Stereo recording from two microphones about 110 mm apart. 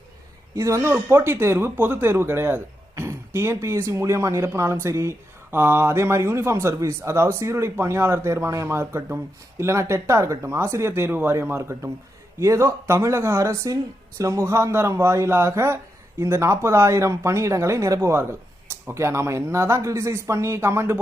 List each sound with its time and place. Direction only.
0.5 s speech: 25° right (ahead or behind)